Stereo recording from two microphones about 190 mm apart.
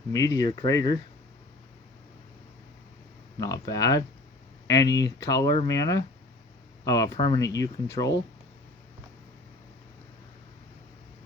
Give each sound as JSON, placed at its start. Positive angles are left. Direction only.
{"t": 0.1, "sound": "speech", "side_deg": 15}
{"t": 3.3, "sound": "speech", "side_deg": 20}